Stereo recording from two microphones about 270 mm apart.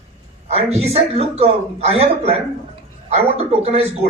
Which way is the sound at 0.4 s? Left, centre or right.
Right.